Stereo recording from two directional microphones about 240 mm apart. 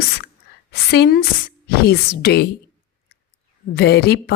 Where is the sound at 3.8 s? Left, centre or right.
Left.